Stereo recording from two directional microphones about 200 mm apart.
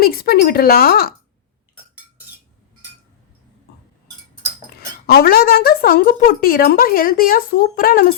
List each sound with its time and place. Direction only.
0.0 s a woman's voice: 50° left (ahead or behind)
5.0 s a woman's voice: 50° left (ahead or behind)